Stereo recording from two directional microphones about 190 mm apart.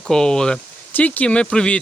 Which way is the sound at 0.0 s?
5° left (ahead or behind).